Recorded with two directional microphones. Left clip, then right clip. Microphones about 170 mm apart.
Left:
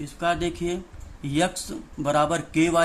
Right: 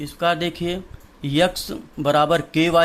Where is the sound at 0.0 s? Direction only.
40° right (ahead or behind).